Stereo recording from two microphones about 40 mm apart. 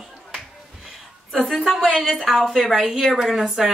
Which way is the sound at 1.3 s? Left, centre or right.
Centre.